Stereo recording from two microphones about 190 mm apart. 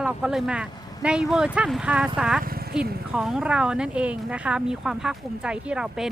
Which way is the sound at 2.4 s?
50° right (ahead or behind).